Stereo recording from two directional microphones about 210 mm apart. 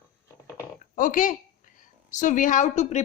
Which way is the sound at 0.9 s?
40° left (ahead or behind).